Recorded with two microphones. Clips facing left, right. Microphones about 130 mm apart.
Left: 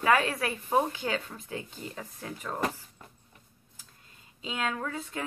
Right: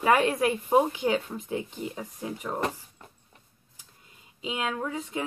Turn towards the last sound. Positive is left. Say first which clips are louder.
# right 3 dB
turn(degrees=-15)  # may be behind; listen again after turning